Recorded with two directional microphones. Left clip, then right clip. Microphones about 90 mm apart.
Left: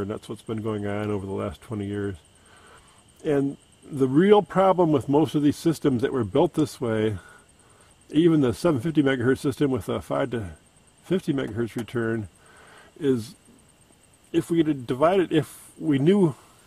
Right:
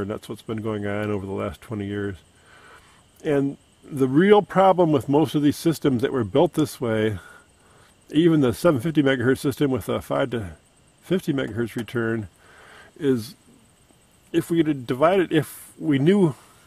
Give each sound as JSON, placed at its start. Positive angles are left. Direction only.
{"t": 0.0, "sound": "speech", "side_deg": -35}